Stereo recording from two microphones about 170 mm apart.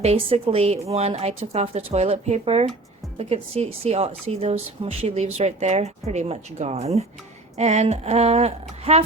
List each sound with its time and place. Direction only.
0.0 s a woman's voice: 35° right (ahead or behind)